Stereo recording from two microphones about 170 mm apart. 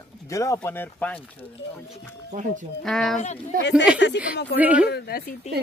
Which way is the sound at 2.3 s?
50° right (ahead or behind).